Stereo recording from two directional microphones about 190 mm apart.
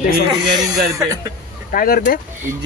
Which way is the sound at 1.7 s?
45° left (ahead or behind).